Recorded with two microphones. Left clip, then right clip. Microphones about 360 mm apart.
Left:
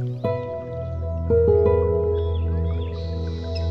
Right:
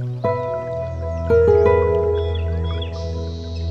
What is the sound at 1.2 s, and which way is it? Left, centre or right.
Music, right.